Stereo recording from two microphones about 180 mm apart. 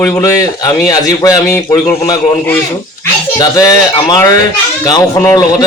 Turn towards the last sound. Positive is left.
turn(degrees=20)  # may be behind; listen again after turning